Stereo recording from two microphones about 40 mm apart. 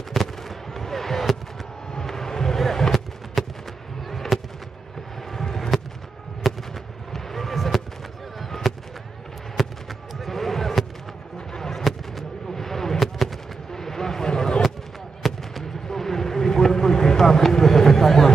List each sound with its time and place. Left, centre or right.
0.1 s fireworks: centre
2.0 s a sound: centre
4.1 s fireworks: centre
5.3 s a sound: centre
6.4 s fireworks: centre
8.4 s a sound: centre
9.6 s fireworks: centre
15.2 s fireworks: centre
15.9 s vehicle: centre